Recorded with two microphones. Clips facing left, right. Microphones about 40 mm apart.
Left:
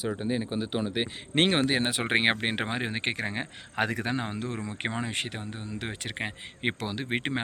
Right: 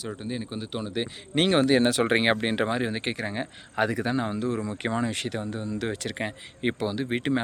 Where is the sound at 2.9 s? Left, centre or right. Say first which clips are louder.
Right 1 dB; left.